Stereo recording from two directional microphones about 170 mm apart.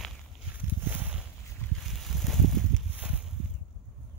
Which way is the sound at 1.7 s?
Centre (ahead or behind).